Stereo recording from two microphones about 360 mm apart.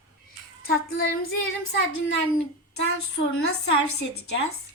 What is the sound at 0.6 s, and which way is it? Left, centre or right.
Music, left.